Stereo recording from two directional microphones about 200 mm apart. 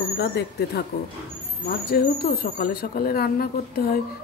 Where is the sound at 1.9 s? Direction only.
50° left (ahead or behind).